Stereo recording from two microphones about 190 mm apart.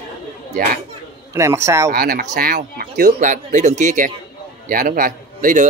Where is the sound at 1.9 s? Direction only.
50° right (ahead or behind).